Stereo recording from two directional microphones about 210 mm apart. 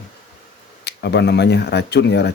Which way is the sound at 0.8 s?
55° left (ahead or behind).